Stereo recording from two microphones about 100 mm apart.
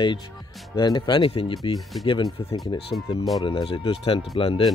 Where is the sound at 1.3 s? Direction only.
70° left (ahead or behind).